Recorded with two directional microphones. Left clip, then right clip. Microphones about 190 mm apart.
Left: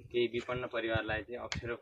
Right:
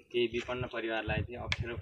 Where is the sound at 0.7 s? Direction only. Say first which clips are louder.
Left 1 dB; 25° right (ahead or behind).